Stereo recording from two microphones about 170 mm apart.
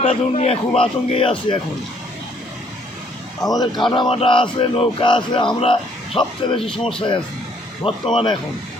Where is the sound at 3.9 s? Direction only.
30° left (ahead or behind).